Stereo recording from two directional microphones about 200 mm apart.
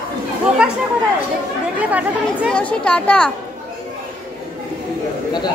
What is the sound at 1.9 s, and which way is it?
Speech, 5° right (ahead or behind).